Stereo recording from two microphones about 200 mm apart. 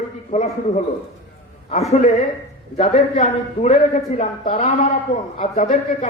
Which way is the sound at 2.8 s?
35° left (ahead or behind).